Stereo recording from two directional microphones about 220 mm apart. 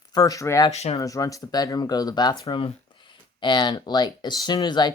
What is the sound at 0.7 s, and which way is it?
Speech, 30° left (ahead or behind).